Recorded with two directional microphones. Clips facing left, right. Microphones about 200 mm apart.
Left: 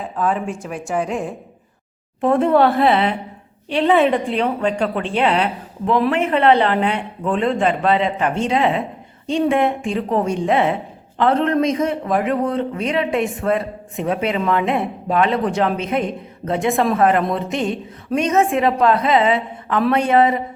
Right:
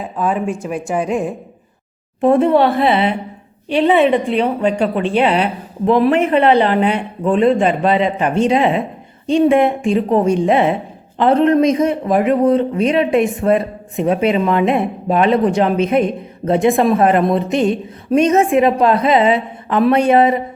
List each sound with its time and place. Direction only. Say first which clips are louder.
0.2 s speech: right 3 dB; 15° right (ahead or behind)
2.5 s a woman's voice: right 1 dB; centre (ahead or behind)
4.4 s speech: right 3 dB; 10° right (ahead or behind)
5.8 s a man's voice: right 5 dB; 20° right (ahead or behind)